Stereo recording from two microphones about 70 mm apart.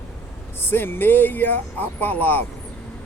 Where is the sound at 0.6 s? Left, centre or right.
Left.